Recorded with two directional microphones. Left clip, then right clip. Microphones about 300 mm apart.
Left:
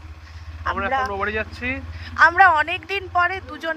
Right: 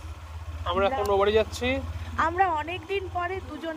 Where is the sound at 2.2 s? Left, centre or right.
Centre.